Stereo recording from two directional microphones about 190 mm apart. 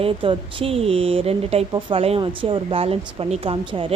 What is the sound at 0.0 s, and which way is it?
Speech, 30° right (ahead or behind).